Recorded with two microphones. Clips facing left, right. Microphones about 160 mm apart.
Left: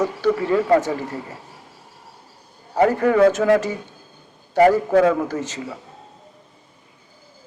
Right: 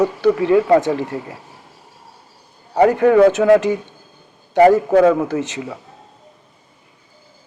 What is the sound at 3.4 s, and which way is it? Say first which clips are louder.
Speech: right 5 dB; 30° right (ahead or behind).